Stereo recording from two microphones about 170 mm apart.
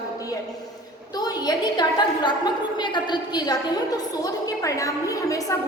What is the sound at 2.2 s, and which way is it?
A woman's voice, 25° left (ahead or behind).